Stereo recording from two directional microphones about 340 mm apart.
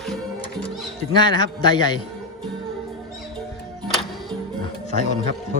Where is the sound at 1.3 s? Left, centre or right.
Centre.